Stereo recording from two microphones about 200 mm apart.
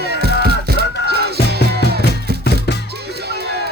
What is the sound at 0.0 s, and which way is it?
Music, 55° right (ahead or behind).